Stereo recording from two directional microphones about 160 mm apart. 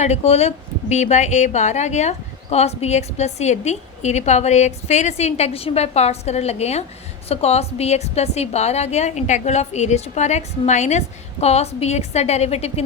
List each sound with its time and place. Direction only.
0.0 s speech: 45° left (ahead or behind)